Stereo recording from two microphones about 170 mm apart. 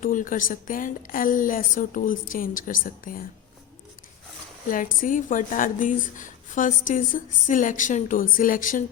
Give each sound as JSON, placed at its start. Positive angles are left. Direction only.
{"t": 0.0, "sound": "a woman's voice", "side_deg": 55}
{"t": 4.7, "sound": "a woman's voice", "side_deg": 50}